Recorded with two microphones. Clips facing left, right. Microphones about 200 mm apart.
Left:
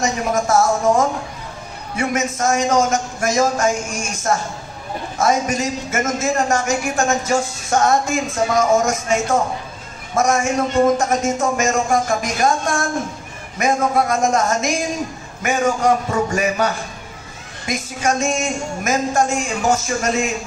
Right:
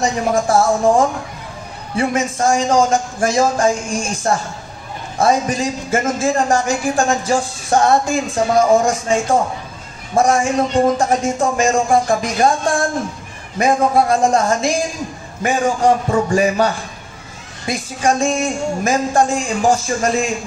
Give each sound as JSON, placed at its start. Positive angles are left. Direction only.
{"t": 0.0, "sound": "speech", "side_deg": -30}